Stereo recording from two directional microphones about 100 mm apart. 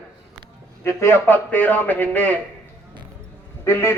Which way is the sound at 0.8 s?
25° left (ahead or behind).